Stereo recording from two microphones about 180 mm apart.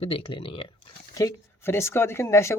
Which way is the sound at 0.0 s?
30° left (ahead or behind).